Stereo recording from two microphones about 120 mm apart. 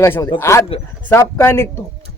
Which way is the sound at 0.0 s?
20° left (ahead or behind).